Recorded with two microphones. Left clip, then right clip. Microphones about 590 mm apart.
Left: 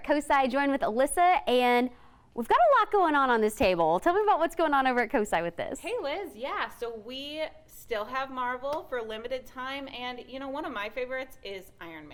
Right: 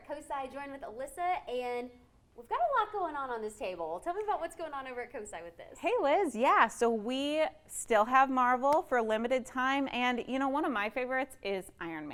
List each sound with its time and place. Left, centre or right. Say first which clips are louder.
0.1 s a woman's voice: left 14 dB; left
5.8 s a woman's voice: right 8 dB; right